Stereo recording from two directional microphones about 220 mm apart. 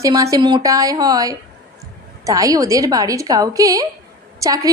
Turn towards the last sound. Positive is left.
turn(degrees=-15)  # may be behind; listen again after turning